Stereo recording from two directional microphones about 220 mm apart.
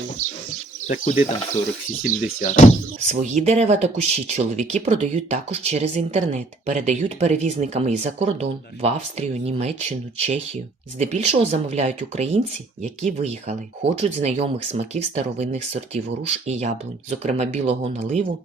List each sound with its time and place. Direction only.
0.2 s speech: 80° left
0.9 s speech: 35° left (ahead or behind)
3.1 s speech: 35° right (ahead or behind)